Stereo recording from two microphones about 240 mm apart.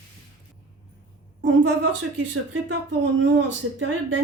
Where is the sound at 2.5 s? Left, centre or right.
Right.